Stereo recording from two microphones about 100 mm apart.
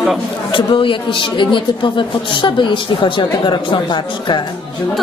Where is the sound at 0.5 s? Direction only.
60° left (ahead or behind).